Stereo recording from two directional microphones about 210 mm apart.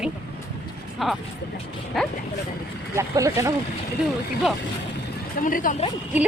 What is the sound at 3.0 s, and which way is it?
Speech, 15° right (ahead or behind).